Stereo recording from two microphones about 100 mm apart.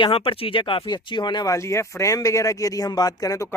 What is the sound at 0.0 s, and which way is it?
Speech, 65° left (ahead or behind).